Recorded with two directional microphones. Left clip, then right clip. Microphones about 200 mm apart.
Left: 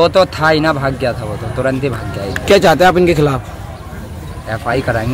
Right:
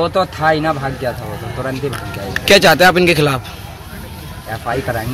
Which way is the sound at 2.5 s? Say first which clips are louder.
Even; centre (ahead or behind).